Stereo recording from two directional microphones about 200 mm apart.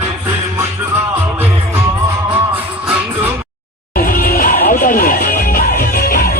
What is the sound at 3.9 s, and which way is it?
Music, 45° left (ahead or behind).